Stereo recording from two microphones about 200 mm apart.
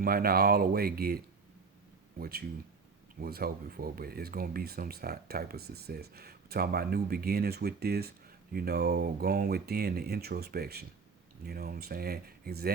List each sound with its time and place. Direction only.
0.0 s speech: 50° right (ahead or behind)